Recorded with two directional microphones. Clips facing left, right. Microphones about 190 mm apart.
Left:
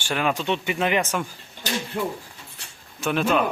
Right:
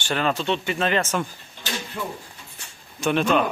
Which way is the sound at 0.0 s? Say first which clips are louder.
Right 1 dB; 10° left (ahead or behind).